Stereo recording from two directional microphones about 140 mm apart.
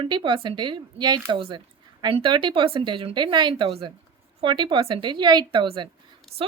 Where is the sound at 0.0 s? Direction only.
35° right (ahead or behind).